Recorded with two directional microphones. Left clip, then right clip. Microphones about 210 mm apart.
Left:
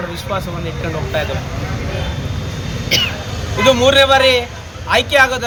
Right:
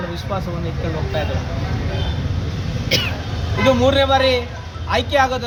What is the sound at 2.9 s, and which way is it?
Speech, 45° right (ahead or behind).